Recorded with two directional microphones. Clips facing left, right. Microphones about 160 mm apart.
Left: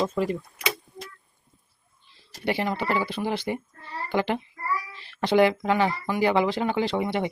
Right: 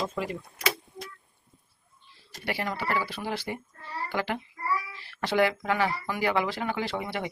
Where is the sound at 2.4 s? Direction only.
25° left (ahead or behind).